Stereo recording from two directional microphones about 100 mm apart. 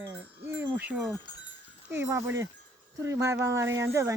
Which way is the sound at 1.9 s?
25° right (ahead or behind).